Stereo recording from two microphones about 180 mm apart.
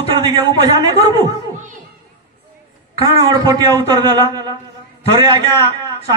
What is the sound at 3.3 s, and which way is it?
A woman's voice, 20° right (ahead or behind).